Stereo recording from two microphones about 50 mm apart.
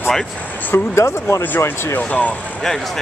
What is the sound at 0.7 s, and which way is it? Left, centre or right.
Speech, left.